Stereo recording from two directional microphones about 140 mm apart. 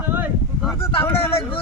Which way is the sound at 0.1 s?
15° right (ahead or behind).